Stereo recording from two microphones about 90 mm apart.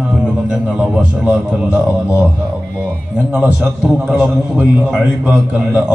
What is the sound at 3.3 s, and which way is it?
A man's voice, 15° right (ahead or behind).